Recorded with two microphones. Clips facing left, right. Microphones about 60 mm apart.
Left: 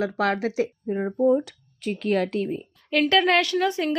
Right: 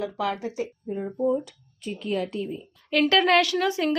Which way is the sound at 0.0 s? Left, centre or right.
Left.